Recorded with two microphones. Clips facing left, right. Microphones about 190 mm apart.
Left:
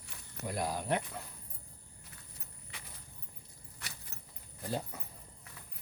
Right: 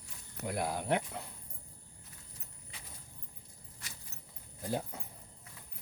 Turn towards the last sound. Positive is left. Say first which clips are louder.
# right 1 dB
turn(degrees=-10)  # may be behind; listen again after turning